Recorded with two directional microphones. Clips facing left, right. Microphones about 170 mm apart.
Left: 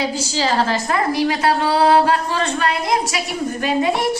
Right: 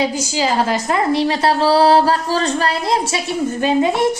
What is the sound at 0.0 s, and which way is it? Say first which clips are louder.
A woman's voice: right 2 dB; 15° right (ahead or behind).